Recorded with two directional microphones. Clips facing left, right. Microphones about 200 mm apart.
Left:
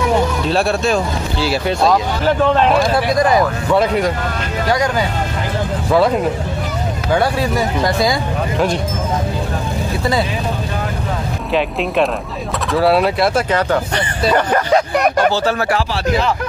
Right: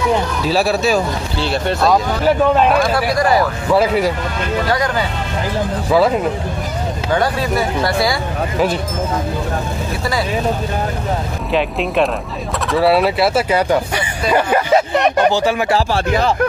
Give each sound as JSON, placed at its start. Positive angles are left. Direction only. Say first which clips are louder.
{"t": 0.5, "sound": "speech", "louder": "right 4 dB", "side_deg": -5}
{"t": 3.2, "sound": "speech", "louder": "left 1 dB", "side_deg": 20}
{"t": 3.6, "sound": "speech", "louder": "right 1 dB", "side_deg": -5}
{"t": 5.9, "sound": "speech", "louder": "even", "side_deg": 0}
{"t": 7.1, "sound": "speech", "louder": "left 1 dB", "side_deg": 10}
{"t": 12.7, "sound": "speech", "louder": "even", "side_deg": 0}
{"t": 15.1, "sound": "speech", "louder": "right 1 dB", "side_deg": -15}
{"t": 15.9, "sound": "speech", "louder": "right 1 dB", "side_deg": -45}